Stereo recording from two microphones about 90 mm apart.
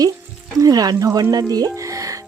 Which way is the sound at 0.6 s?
45° right (ahead or behind).